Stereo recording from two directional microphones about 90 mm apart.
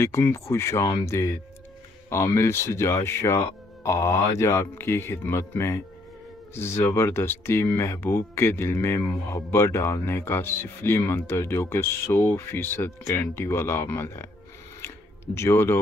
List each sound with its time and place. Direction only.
0.0 s speech: 30° left (ahead or behind)
15.3 s speech: 30° left (ahead or behind)